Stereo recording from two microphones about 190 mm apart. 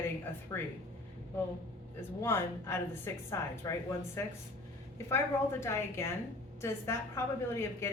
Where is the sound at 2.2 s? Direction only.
15° left (ahead or behind).